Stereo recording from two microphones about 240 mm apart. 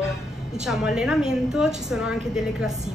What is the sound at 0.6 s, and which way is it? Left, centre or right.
A woman's voice, centre.